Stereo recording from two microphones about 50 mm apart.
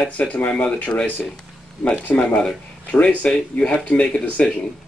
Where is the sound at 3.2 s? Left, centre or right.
Centre.